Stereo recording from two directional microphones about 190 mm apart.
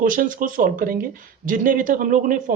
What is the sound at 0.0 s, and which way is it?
Speech, 45° right (ahead or behind).